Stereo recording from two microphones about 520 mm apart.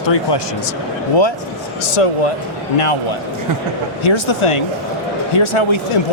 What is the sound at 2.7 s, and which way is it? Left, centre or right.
Speech, left.